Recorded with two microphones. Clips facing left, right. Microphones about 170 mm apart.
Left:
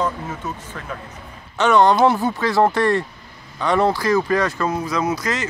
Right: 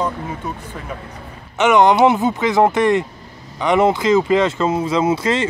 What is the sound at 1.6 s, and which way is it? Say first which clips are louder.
Speech: right 2 dB; 20° right (ahead or behind).